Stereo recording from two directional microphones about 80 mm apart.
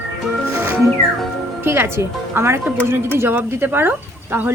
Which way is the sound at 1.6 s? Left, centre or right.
Right.